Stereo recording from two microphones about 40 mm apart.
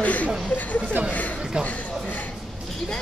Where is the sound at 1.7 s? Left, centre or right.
Left.